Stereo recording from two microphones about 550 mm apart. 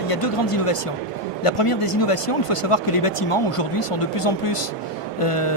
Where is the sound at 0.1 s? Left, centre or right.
Left.